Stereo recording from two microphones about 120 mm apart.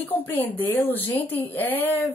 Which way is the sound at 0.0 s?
15° left (ahead or behind).